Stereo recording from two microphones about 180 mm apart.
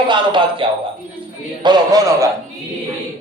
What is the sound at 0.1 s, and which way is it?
Speech, 25° right (ahead or behind).